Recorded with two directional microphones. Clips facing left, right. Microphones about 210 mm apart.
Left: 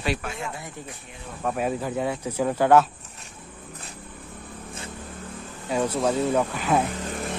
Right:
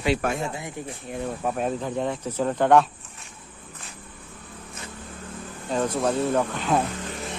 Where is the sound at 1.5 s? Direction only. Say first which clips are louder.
Left 4 dB; 5° left (ahead or behind).